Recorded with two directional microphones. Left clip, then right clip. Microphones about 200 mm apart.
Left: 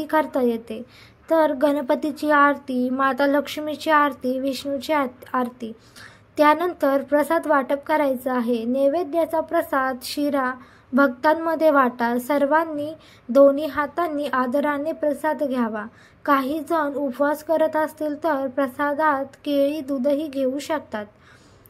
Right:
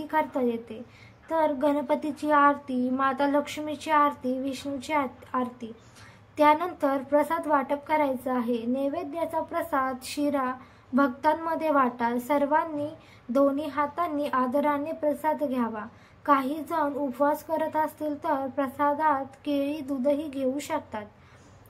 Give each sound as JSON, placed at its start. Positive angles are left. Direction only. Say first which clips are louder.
{"t": 0.0, "sound": "a woman's voice", "louder": "left 6 dB", "side_deg": 25}